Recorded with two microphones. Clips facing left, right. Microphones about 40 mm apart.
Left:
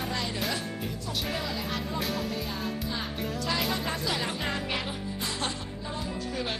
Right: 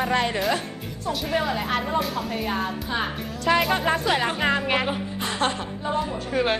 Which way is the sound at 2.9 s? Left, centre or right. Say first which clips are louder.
Right 5 dB; right.